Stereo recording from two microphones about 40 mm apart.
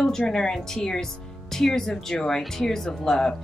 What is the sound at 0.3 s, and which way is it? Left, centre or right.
Speech, centre.